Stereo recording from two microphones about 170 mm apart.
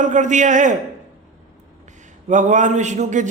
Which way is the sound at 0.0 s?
45° right (ahead or behind).